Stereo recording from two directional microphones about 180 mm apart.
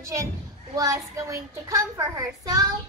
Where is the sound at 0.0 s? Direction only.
15° right (ahead or behind).